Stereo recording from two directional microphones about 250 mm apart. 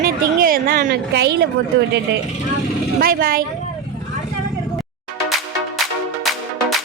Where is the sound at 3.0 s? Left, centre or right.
Right.